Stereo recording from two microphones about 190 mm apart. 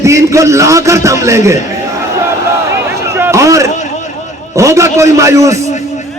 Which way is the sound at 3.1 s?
15° right (ahead or behind).